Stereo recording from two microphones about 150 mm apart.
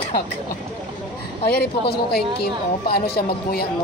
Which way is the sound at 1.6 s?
90° left.